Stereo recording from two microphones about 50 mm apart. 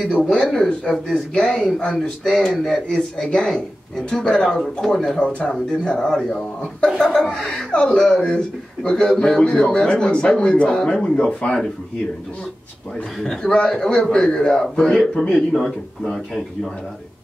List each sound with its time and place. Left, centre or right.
0.3 s speech: centre
2.4 s speech: centre
2.9 s speech: centre
5.2 s speech: left
12.9 s speech: centre